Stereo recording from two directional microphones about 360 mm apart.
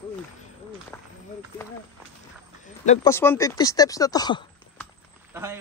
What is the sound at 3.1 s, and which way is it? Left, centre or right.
Speech, centre.